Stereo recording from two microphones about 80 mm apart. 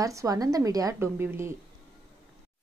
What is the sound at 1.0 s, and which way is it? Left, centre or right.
Speech, right.